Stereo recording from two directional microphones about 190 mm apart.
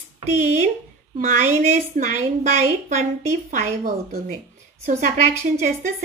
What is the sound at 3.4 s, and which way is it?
A woman's voice, 45° right (ahead or behind).